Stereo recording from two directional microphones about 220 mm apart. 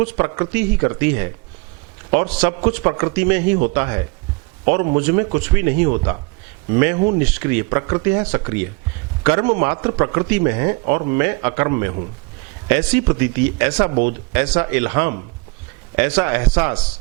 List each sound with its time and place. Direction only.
0.0 s speech: 10° right (ahead or behind)